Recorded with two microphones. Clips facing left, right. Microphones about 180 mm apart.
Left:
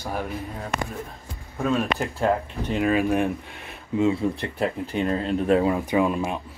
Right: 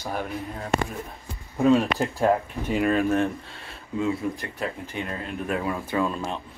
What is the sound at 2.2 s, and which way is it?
Speech, 5° right (ahead or behind).